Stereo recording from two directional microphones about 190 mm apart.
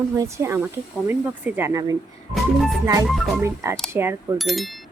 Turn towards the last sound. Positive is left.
turn(degrees=0)  # may be behind; listen again after turning